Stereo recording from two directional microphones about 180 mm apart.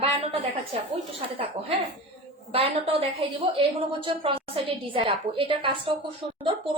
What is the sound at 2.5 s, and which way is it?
A woman's voice, 30° right (ahead or behind).